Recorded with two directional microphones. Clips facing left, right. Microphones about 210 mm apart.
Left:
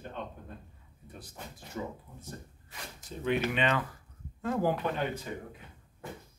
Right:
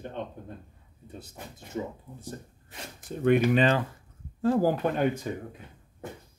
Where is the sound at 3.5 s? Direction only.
30° right (ahead or behind).